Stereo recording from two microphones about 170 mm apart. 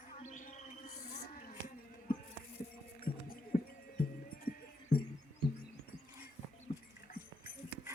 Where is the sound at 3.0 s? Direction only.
60° left (ahead or behind).